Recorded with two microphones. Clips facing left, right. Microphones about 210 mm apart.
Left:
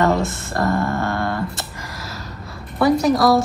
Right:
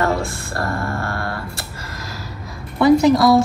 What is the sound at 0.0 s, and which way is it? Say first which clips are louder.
Speech: left 2 dB; 20° left (ahead or behind).